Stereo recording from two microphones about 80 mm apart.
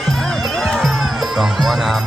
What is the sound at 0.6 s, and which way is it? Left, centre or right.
Music, centre.